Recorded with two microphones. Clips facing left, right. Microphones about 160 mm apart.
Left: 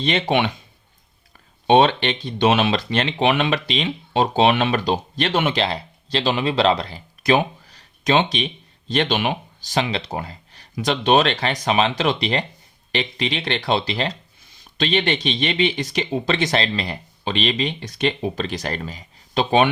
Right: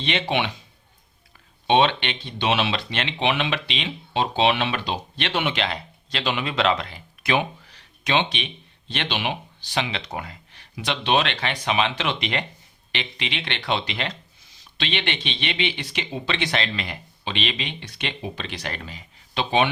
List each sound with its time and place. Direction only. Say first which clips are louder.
0.0 s speech: left 5 dB; 40° left (ahead or behind)
1.6 s speech: left 4 dB; 45° left (ahead or behind)